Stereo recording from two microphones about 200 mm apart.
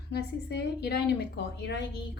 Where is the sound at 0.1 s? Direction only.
55° left (ahead or behind).